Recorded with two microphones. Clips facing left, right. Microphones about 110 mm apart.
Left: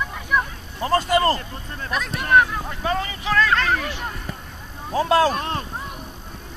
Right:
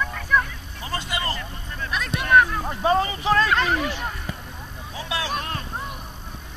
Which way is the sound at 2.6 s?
25° right (ahead or behind).